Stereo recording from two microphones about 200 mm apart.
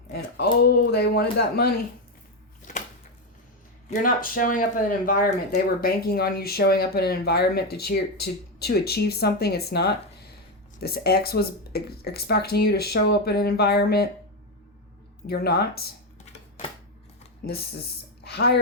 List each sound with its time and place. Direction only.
0.6 s speech: 55° left (ahead or behind)
2.6 s a sound: 40° left (ahead or behind)
3.8 s speech: 40° left (ahead or behind)
15.3 s speech: 55° left (ahead or behind)
17.4 s speech: 50° left (ahead or behind)